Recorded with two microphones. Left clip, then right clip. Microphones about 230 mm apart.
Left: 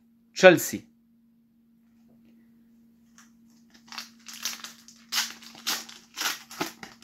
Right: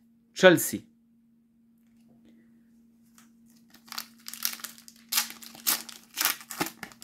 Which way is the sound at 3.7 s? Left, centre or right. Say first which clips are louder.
Even; centre.